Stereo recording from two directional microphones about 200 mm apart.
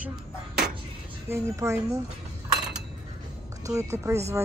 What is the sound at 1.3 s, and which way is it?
Speech, 15° right (ahead or behind).